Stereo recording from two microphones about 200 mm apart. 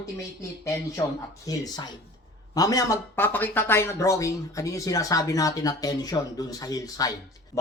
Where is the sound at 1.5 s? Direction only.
20° left (ahead or behind).